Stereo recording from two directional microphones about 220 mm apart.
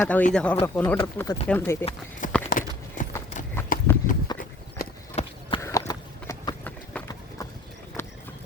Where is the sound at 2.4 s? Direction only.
35° left (ahead or behind).